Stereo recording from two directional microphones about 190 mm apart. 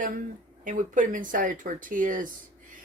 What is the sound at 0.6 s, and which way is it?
Speech, 45° right (ahead or behind).